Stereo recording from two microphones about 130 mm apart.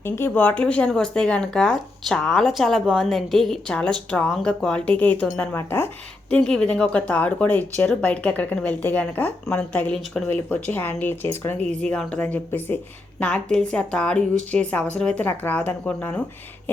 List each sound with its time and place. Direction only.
0.0 s a woman's voice: 15° left (ahead or behind)
6.3 s speech: 5° left (ahead or behind)